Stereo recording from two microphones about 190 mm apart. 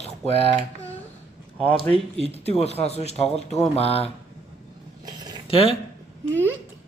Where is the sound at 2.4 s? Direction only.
35° left (ahead or behind).